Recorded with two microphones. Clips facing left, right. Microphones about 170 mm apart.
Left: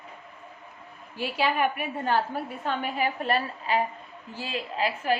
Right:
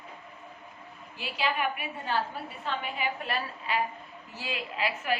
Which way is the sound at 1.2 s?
50° left (ahead or behind).